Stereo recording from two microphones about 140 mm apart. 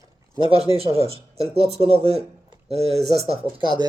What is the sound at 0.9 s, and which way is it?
Speech, 45° left (ahead or behind).